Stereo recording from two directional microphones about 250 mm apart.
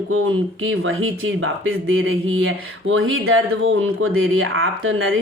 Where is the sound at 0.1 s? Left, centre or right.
Right.